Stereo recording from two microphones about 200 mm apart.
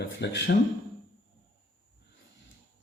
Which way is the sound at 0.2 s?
65° left (ahead or behind).